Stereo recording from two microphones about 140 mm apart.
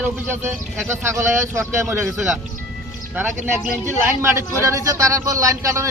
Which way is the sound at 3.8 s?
15° right (ahead or behind).